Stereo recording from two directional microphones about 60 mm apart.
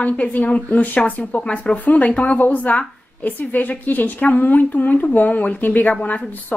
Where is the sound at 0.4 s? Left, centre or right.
Left.